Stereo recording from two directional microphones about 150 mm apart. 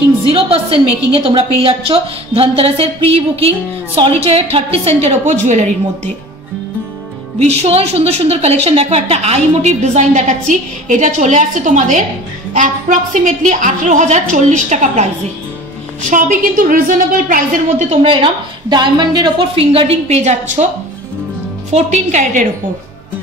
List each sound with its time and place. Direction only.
0.3 s a woman's voice: 40° right (ahead or behind); by 5.8 s 55° right (ahead or behind)
7.3 s a woman's voice: 45° right (ahead or behind); by 17.8 s 65° right (ahead or behind)
17.8 s a woman's voice: 35° right (ahead or behind)
21.7 s a woman's voice: 55° right (ahead or behind)